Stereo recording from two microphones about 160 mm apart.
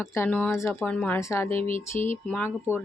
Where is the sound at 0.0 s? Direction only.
15° left (ahead or behind).